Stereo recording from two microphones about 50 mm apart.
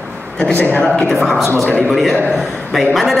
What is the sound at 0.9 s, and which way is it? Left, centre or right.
Speech, centre.